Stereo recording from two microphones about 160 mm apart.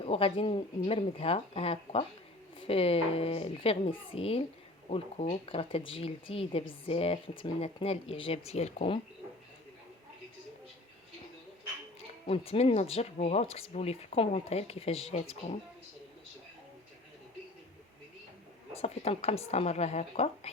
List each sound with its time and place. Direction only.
0.0 s speech: 35° left (ahead or behind)
12.3 s speech: 40° left (ahead or behind)
18.7 s speech: 40° left (ahead or behind)